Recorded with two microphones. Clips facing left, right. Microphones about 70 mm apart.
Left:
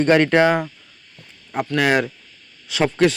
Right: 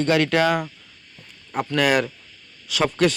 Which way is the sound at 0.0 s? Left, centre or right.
Left.